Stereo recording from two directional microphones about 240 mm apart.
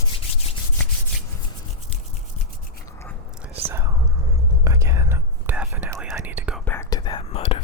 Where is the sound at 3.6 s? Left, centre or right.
Centre.